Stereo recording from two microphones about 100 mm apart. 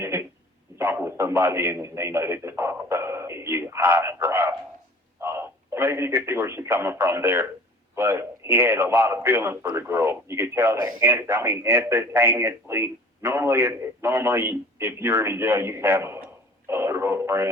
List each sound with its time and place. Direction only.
0.0 s a sound: 25° right (ahead or behind)
0.8 s a man's voice: 25° right (ahead or behind)
16.6 s radio: 25° right (ahead or behind)